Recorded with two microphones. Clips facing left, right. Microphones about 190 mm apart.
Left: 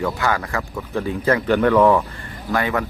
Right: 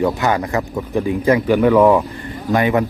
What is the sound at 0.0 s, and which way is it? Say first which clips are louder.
Speech: right 5 dB; 20° right (ahead or behind).